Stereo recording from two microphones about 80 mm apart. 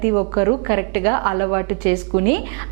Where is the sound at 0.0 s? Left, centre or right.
Right.